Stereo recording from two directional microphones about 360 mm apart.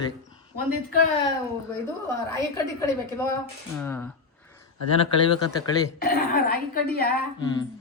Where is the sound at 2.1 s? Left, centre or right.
Centre.